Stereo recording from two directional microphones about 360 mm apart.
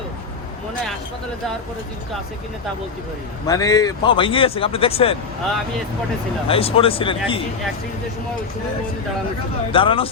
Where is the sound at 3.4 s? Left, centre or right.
Centre.